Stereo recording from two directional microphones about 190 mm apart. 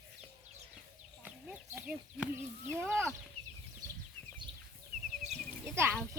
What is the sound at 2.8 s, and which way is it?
Speech, centre (ahead or behind).